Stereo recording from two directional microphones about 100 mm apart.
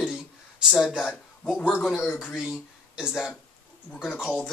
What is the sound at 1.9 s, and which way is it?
Speech, 5° right (ahead or behind).